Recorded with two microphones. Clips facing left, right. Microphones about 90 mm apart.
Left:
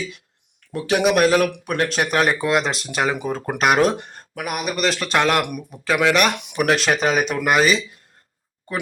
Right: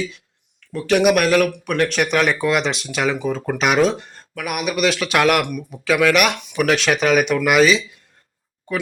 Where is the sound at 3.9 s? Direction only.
60° left (ahead or behind).